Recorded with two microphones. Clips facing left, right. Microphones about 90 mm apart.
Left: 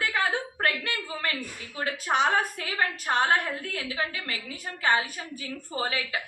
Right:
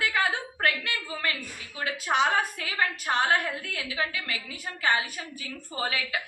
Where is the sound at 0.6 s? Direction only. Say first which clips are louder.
Right 3 dB; 35° left (ahead or behind).